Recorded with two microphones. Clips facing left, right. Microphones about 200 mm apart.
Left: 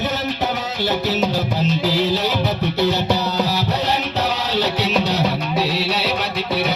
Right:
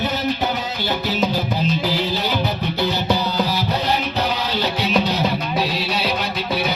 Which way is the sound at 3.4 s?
75° left (ahead or behind).